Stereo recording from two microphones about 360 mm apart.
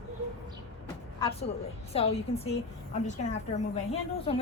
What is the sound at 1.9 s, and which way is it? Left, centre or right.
A woman's voice, centre.